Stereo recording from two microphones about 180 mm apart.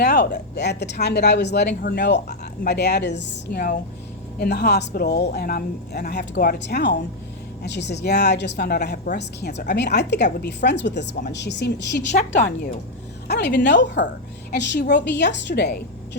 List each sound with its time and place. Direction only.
0.0 s speech: 65° left (ahead or behind)
12.1 s a woman's voice: 45° left (ahead or behind)
13.2 s speech: 70° left (ahead or behind)
13.8 s speech: 80° left
14.5 s speech: 70° left (ahead or behind)